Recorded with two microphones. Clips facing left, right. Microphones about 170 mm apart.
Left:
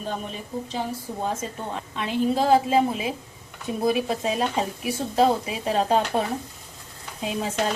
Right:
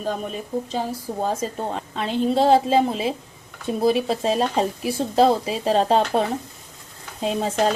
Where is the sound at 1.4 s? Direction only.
35° right (ahead or behind).